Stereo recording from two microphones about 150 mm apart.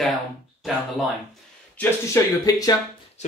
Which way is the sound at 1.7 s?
20° left (ahead or behind).